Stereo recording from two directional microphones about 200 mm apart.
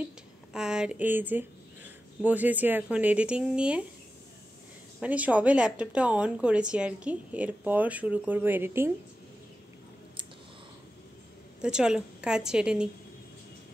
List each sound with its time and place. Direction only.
0.5 s speech: 5° right (ahead or behind)
5.0 s speech: 5° right (ahead or behind)
11.6 s a woman's voice: 5° right (ahead or behind)